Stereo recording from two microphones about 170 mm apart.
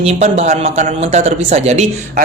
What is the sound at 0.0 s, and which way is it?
Speech, 40° right (ahead or behind).